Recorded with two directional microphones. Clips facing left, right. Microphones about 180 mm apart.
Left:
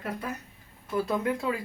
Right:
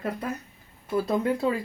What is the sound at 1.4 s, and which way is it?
Speech, 30° right (ahead or behind).